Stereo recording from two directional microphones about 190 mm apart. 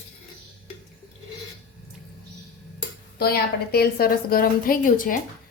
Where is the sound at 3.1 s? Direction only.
55° left (ahead or behind).